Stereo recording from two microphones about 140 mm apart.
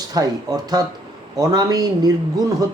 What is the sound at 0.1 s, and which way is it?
A man's voice, 25° right (ahead or behind).